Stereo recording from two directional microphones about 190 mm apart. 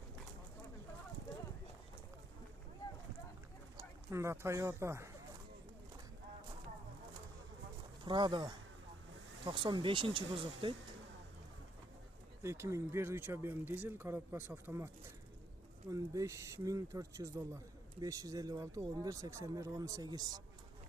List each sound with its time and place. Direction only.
3.8 s speech: 15° right (ahead or behind)
8.0 s speech: 25° right (ahead or behind)
12.4 s speech: 15° right (ahead or behind)
15.9 s speech: 15° right (ahead or behind)